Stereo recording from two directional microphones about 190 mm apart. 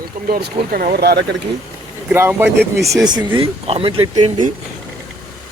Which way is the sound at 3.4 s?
30° right (ahead or behind).